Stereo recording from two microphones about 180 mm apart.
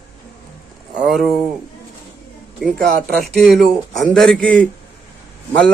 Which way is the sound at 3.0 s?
55° right (ahead or behind).